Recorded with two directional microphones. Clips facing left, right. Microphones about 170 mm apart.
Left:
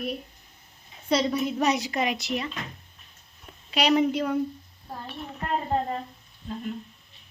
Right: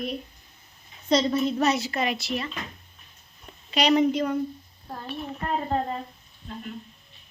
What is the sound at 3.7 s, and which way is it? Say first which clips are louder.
Speech: right 1 dB; 5° left (ahead or behind).